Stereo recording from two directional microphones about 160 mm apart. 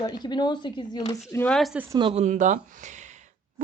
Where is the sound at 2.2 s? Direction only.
50° right (ahead or behind).